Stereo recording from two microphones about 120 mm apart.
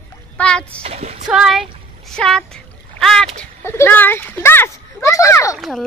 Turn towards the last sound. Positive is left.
turn(degrees=0)  # may be behind; listen again after turning